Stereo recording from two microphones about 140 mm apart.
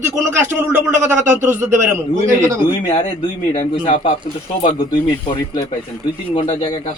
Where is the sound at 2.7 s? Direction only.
30° left (ahead or behind).